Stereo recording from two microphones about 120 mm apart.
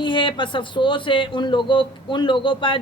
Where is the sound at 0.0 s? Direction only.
45° left (ahead or behind).